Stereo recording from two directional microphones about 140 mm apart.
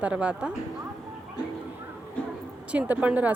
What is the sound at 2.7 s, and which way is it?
Speech, 10° right (ahead or behind).